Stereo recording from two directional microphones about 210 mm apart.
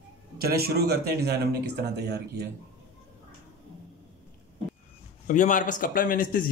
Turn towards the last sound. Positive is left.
turn(degrees=40)  # may be behind; listen again after turning